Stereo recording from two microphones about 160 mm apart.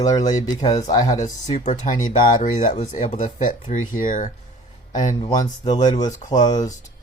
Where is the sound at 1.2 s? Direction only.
45° left (ahead or behind).